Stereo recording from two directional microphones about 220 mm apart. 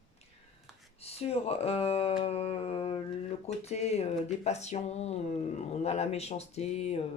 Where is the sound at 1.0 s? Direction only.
25° left (ahead or behind).